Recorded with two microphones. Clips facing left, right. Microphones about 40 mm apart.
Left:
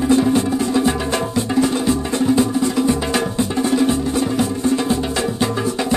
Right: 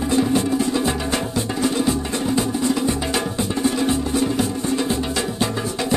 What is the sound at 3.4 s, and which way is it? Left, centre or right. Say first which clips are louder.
Music: left 2 dB; left.